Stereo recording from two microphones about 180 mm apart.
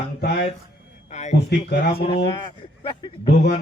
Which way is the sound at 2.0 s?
30° left (ahead or behind).